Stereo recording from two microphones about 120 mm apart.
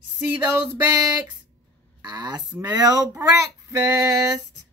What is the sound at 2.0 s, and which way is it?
Speech, 35° right (ahead or behind).